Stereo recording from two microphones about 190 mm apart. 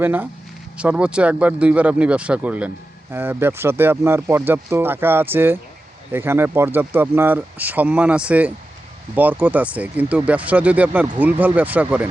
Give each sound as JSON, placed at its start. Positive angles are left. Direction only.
{"t": 0.0, "sound": "speech", "side_deg": -10}